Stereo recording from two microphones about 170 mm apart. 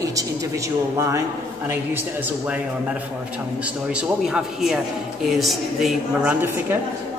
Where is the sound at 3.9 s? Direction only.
5° right (ahead or behind).